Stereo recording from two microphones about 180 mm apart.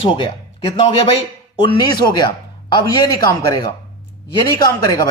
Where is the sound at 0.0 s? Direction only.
30° left (ahead or behind).